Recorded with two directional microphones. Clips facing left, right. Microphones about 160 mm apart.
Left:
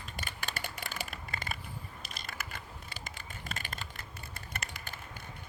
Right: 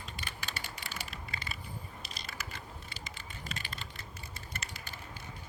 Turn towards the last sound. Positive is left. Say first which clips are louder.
# left 2 dB
turn(degrees=50)  # may be behind; listen again after turning